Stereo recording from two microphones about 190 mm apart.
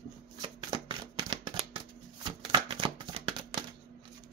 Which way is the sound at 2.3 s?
25° right (ahead or behind).